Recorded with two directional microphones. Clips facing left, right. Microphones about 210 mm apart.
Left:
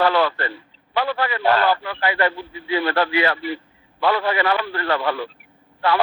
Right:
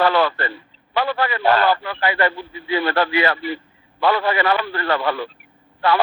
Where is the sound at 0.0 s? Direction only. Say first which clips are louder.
Right 1 dB; 55° right (ahead or behind).